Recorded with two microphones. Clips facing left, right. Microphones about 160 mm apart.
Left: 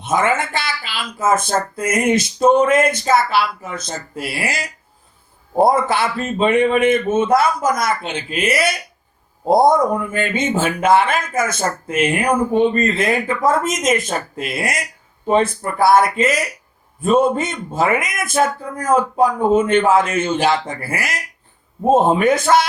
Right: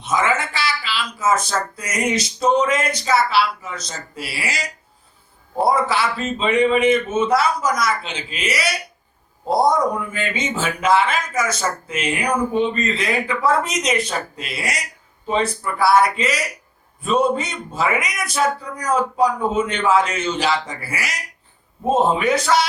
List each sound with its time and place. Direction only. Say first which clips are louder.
0.0 s speech: left 3 dB; 55° left (ahead or behind)